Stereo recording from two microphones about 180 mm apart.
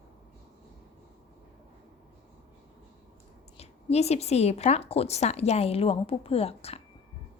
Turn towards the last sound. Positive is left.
turn(degrees=35)  # may be behind; listen again after turning